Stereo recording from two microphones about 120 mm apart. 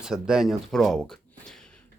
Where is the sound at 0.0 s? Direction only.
5° right (ahead or behind).